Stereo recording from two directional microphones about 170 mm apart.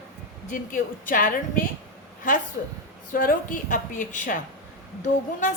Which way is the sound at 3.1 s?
55° left (ahead or behind).